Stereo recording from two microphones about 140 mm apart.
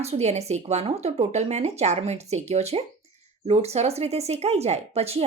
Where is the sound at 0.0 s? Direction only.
50° right (ahead or behind).